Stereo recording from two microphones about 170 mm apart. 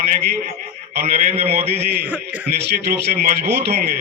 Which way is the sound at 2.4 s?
60° right (ahead or behind).